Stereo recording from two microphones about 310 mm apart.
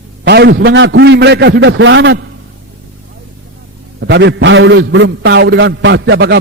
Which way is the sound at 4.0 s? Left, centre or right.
Right.